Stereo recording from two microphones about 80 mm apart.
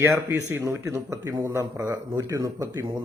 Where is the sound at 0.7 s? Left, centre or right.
Right.